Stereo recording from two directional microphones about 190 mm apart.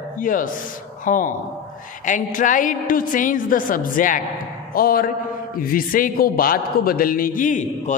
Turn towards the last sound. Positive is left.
turn(degrees=40)  # may be behind; listen again after turning